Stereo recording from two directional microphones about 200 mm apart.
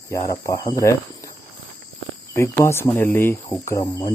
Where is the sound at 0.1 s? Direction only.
15° left (ahead or behind).